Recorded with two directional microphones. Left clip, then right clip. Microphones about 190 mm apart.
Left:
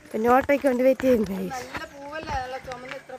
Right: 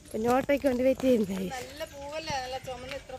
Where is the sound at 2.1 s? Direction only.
40° left (ahead or behind).